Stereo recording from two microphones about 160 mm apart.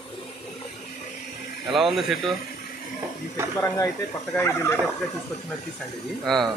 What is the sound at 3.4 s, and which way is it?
Speech, 15° right (ahead or behind).